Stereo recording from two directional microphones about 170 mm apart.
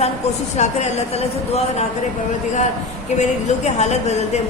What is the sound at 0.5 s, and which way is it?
Speech, 40° left (ahead or behind).